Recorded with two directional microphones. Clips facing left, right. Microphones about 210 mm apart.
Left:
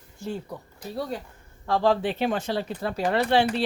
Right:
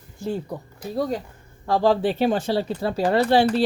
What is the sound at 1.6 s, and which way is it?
Speech, 35° right (ahead or behind).